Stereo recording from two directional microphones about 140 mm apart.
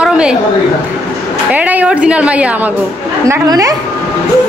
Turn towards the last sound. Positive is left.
turn(degrees=-25)  # may be behind; listen again after turning